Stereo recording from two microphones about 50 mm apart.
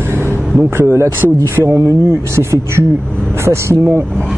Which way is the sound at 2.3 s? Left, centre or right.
Right.